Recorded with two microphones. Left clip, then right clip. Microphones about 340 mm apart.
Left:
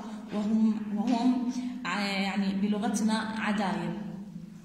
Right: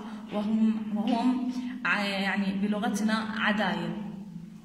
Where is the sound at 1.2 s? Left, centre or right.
Right.